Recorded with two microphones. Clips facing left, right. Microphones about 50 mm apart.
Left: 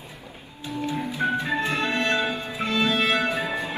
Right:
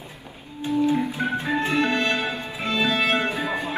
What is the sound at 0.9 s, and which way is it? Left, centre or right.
Organ, right.